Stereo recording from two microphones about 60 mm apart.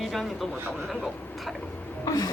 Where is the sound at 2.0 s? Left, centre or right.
Left.